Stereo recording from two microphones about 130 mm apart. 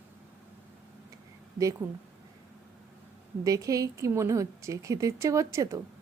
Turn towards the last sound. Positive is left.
turn(degrees=-25)  # may be behind; listen again after turning